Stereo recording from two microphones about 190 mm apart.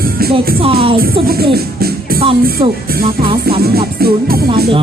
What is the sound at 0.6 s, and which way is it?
Music, 30° right (ahead or behind).